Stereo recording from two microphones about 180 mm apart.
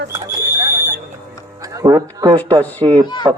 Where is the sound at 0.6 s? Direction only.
15° right (ahead or behind).